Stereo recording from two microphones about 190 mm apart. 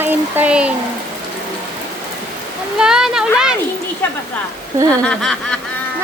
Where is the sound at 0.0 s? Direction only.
10° right (ahead or behind).